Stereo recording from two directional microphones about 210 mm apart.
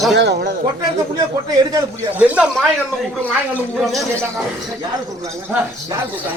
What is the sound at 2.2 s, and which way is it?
Speech, 5° right (ahead or behind).